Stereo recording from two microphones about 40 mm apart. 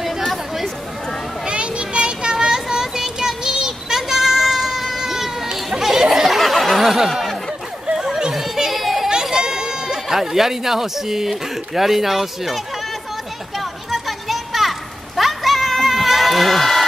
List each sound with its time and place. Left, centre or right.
1.4 s children playing: right
2.3 s child singing: centre
7.9 s children playing: centre
9.1 s a sound: centre
10.1 s speech: centre
13.6 s children playing: centre